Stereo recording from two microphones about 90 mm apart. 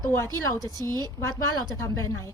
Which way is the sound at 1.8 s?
30° left (ahead or behind).